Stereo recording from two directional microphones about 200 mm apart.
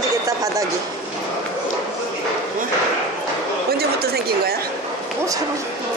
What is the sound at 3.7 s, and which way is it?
Speech, 50° right (ahead or behind).